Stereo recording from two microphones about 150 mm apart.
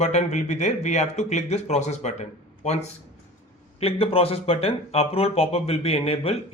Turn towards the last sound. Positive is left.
turn(degrees=40)  # may be behind; listen again after turning